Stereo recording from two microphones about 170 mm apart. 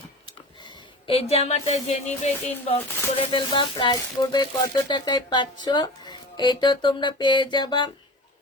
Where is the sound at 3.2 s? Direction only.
30° left (ahead or behind).